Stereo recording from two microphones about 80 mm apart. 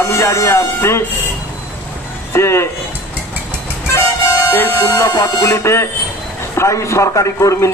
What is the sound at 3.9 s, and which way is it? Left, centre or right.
A man's voice, left.